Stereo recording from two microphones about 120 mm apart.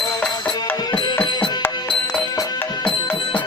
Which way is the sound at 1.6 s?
10° left (ahead or behind).